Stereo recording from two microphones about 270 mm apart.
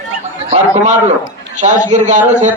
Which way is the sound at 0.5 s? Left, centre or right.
Right.